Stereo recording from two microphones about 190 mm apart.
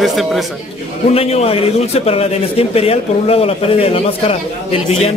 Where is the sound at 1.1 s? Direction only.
30° left (ahead or behind).